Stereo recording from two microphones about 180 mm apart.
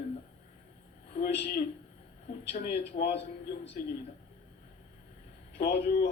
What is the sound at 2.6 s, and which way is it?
Speech, 65° left (ahead or behind).